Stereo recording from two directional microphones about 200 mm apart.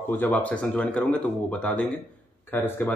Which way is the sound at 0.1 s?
10° left (ahead or behind).